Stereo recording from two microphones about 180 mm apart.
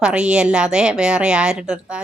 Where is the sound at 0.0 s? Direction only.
5° right (ahead or behind).